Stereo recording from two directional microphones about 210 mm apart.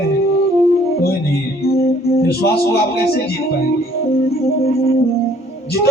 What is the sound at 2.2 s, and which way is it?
A man's voice, 50° left (ahead or behind).